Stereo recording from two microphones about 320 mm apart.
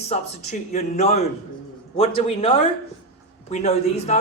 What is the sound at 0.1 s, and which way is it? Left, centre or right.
A man's voice, left.